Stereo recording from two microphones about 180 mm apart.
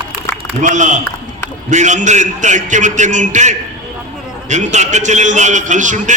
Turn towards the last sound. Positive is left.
turn(degrees=-45)  # may be behind; listen again after turning